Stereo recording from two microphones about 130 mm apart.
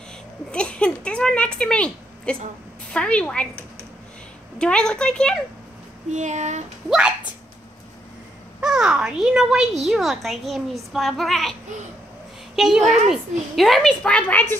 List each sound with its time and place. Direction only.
0.5 s a woman's voice: 10° left (ahead or behind)
6.1 s speech: 65° right (ahead or behind)
6.9 s speech: 5° right (ahead or behind)
8.5 s a child's voice: 5° right (ahead or behind)
12.5 s a child's voice: 5° right (ahead or behind)